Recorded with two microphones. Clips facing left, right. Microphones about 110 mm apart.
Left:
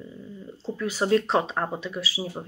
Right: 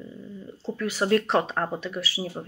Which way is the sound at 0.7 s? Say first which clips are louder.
Even; 15° left (ahead or behind).